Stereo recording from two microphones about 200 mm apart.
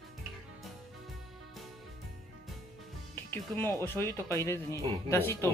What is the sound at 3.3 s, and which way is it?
Speech, 10° left (ahead or behind).